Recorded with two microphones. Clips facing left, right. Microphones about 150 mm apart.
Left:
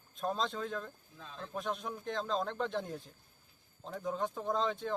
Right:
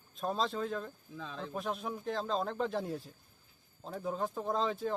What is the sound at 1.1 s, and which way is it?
Speech, 90° right.